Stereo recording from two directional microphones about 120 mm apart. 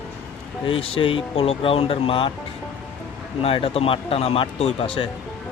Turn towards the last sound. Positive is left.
turn(degrees=50)  # may be behind; listen again after turning